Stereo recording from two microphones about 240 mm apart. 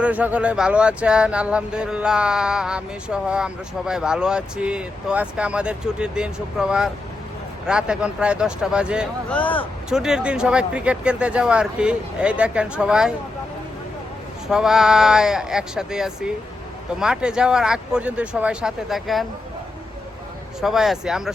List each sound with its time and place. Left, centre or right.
0.0 s speech: centre
14.4 s speech: centre
20.6 s speech: centre